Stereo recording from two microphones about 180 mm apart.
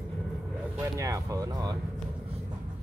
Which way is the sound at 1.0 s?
15° right (ahead or behind).